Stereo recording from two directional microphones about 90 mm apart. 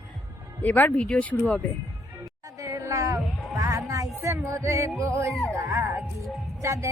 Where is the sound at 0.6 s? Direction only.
20° left (ahead or behind).